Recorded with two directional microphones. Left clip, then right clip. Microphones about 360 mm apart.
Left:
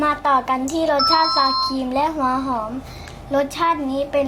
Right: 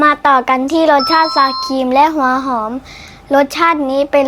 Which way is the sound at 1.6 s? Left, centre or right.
Right.